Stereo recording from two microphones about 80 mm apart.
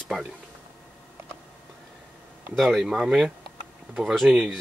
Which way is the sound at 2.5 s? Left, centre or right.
Centre.